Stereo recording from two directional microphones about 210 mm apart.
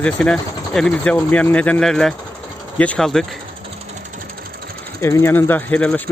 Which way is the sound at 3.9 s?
40° right (ahead or behind).